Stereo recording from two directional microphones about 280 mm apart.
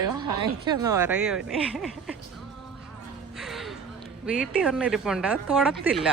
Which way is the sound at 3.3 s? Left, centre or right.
Centre.